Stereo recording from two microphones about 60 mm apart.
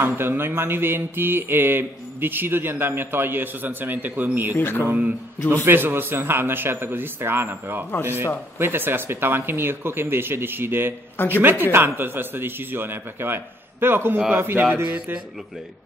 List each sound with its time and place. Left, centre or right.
0.0 s mantra: right
4.6 s speech: left
5.7 s mantra: right